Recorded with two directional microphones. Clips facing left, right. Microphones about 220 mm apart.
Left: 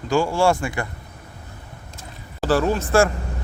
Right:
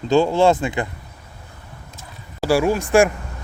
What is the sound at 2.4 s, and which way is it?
Speech, 10° right (ahead or behind).